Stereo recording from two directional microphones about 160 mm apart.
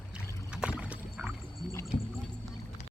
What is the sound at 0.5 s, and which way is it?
Rowboat, 5° right (ahead or behind).